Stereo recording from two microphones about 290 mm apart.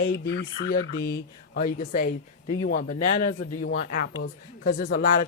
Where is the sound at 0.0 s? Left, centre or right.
Left.